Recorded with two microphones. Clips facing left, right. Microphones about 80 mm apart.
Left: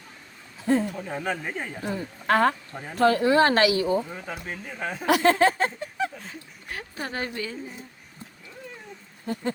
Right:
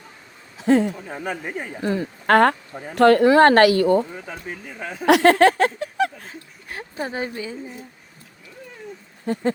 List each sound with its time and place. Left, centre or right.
0.6 s speech: right
0.9 s speech: centre
1.8 s speech: right
4.4 s speech: centre
5.0 s a sound: right
6.7 s speech: right
9.2 s a sound: right